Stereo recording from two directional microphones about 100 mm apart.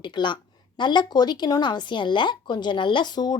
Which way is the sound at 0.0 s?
50° left (ahead or behind).